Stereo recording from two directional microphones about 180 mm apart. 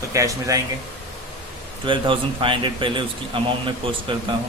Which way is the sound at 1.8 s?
30° right (ahead or behind).